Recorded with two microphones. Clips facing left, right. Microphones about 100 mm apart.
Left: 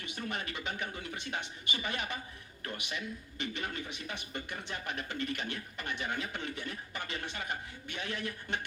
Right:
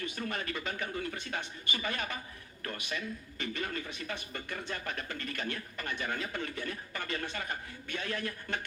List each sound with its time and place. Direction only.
0.0 s speech: 20° left (ahead or behind)